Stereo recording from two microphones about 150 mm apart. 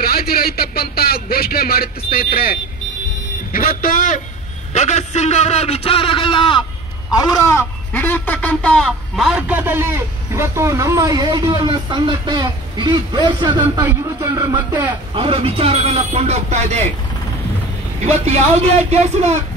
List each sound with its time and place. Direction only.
0.0 s speech: 90° left
3.5 s a man's voice: 70° left (ahead or behind)
4.7 s a man's voice: 50° left (ahead or behind); by 6.6 s 35° left (ahead or behind)
7.1 s speech: 25° left (ahead or behind); by 13.8 s 30° right (ahead or behind)
15.1 s speech: 40° right (ahead or behind)
18.2 s speech: 45° right (ahead or behind)